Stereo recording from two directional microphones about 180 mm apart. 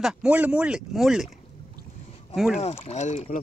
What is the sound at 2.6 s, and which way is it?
Speech, 35° left (ahead or behind).